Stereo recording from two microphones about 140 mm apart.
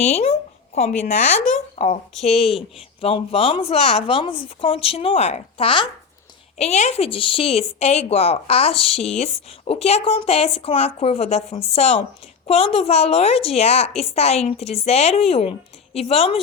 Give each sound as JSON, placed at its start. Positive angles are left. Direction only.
{"t": 0.0, "sound": "a woman's voice", "side_deg": 50}